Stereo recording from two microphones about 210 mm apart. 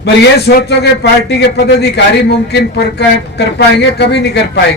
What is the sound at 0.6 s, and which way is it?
A man's voice, 55° left (ahead or behind).